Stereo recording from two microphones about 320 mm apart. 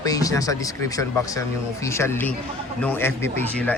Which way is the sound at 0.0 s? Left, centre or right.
Centre.